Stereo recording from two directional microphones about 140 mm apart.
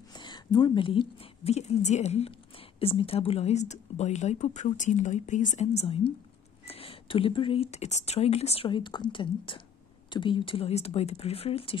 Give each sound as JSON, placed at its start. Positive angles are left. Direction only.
{"t": 0.1, "sound": "a woman's voice", "side_deg": 30}
{"t": 8.6, "sound": "a woman's voice", "side_deg": 35}